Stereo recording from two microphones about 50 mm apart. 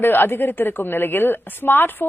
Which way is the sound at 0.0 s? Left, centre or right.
Left.